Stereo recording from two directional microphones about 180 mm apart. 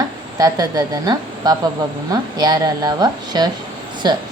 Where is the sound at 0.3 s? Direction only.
20° right (ahead or behind).